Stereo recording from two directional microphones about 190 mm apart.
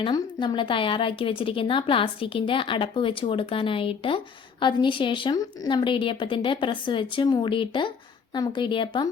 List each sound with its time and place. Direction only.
0.0 s a woman's voice: 25° left (ahead or behind)